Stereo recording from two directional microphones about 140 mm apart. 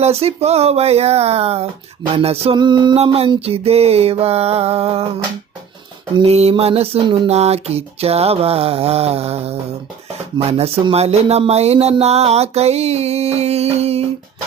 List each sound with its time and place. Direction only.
0.0 s speech: 45° right (ahead or behind)
2.6 s music: 35° right (ahead or behind)
3.0 s speech: 45° right (ahead or behind)
6.1 s speech: 45° right (ahead or behind)